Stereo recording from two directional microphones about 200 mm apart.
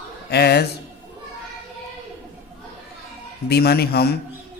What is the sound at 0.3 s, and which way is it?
Speech, 55° left (ahead or behind).